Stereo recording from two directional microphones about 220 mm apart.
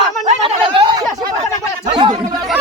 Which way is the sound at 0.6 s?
25° right (ahead or behind).